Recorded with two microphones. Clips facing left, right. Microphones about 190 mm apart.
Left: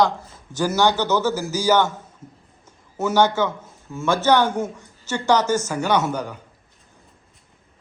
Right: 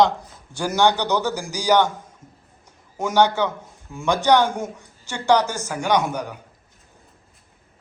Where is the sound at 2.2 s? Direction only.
10° left (ahead or behind).